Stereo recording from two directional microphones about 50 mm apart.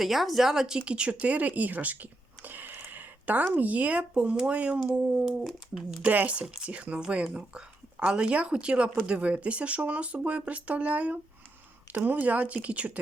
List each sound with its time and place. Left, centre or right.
0.0 s speech: centre
0.8 s speech: right
2.9 s a sound: right
3.5 s speech: right
5.4 s speech: centre
6.1 s speech: right